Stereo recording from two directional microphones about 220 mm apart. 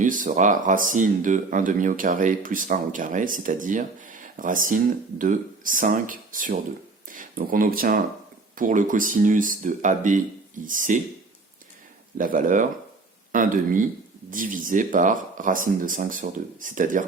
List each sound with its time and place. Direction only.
0.0 s speech: 35° right (ahead or behind)
12.1 s speech: 35° right (ahead or behind)